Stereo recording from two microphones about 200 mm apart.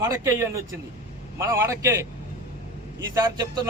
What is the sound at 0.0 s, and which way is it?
A man's voice, 15° right (ahead or behind).